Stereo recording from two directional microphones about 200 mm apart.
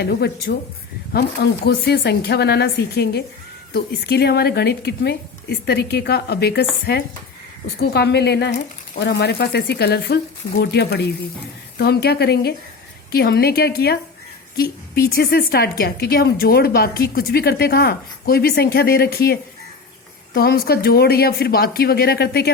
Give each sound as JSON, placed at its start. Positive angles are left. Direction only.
{"t": 0.0, "sound": "a woman's voice", "side_deg": 55}
{"t": 7.8, "sound": "a woman's voice", "side_deg": 55}